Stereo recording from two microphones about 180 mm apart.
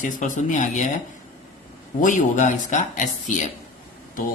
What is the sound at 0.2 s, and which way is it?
Speech, 40° left (ahead or behind).